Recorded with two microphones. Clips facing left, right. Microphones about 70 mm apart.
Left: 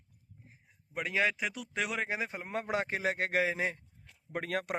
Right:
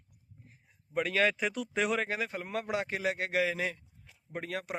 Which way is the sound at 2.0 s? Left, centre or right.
Centre.